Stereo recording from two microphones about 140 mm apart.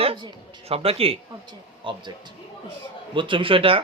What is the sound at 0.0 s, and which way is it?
A man's voice, 40° right (ahead or behind).